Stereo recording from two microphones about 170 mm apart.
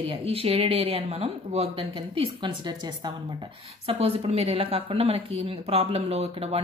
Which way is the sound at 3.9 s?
35° right (ahead or behind).